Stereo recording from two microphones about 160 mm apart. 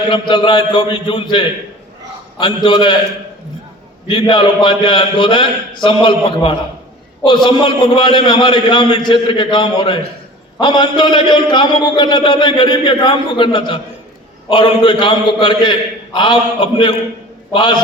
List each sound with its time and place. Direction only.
0.1 s a man's voice: 30° left (ahead or behind)
4.0 s a man's voice: 30° left (ahead or behind)